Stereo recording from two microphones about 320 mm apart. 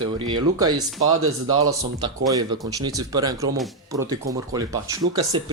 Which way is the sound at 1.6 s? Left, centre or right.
Centre.